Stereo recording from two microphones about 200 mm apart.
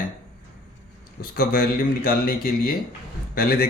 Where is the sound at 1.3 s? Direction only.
50° left (ahead or behind).